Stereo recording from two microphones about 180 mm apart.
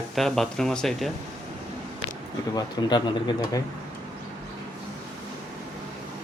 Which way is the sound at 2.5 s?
25° left (ahead or behind).